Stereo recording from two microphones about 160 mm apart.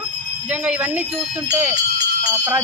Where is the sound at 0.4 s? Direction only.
10° right (ahead or behind).